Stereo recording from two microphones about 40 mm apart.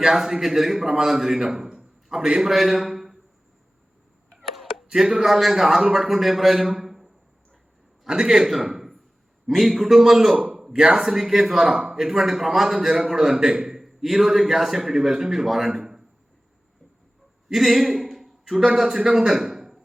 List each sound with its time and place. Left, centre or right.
0.0 s a man's voice: centre
2.5 s a man's voice: centre
4.4 s a sound: centre
4.9 s a man's voice: centre
6.7 s a sound: centre
8.0 s a man's voice: centre
10.3 s a man's voice: right; by 15.8 s centre
17.5 s a man's voice: centre